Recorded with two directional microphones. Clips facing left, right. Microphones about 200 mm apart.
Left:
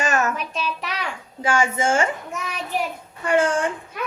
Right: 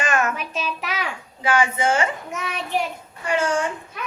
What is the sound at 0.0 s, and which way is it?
Child singing, 40° left (ahead or behind).